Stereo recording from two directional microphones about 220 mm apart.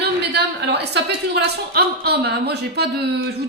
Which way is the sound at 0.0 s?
50° right (ahead or behind).